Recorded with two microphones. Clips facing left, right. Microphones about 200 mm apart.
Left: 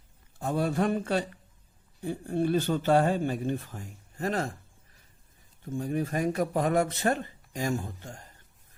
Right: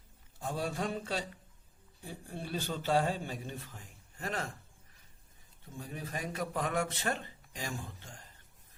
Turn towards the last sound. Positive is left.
turn(degrees=45)  # may be behind; listen again after turning